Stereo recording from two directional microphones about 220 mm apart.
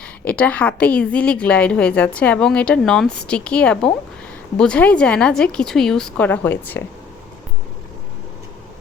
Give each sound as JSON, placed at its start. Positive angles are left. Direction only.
{"t": 0.0, "sound": "a woman's voice", "side_deg": 5}